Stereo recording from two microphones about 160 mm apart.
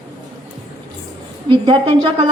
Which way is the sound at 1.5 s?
30° right (ahead or behind).